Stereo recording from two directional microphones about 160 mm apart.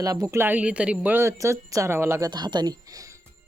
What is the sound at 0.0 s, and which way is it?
A woman's voice, 20° right (ahead or behind).